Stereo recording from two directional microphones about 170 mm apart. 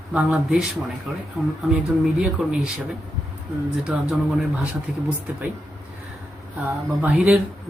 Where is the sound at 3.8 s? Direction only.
5° right (ahead or behind).